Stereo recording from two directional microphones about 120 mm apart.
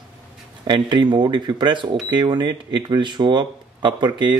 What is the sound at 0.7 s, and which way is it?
Speech, 40° right (ahead or behind).